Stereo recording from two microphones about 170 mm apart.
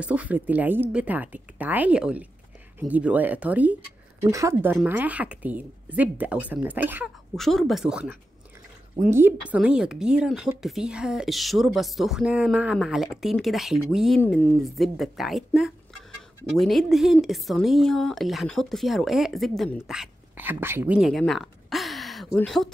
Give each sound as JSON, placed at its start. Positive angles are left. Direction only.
{"t": 0.0, "sound": "speech", "side_deg": -10}
{"t": 4.2, "sound": "speech", "side_deg": -20}
{"t": 7.3, "sound": "speech", "side_deg": 0}
{"t": 14.2, "sound": "speech", "side_deg": 10}
{"t": 14.6, "sound": "speech", "side_deg": 0}